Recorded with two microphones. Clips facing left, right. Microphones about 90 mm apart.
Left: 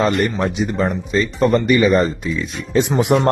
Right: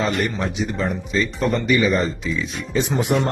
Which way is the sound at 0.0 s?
45° left (ahead or behind).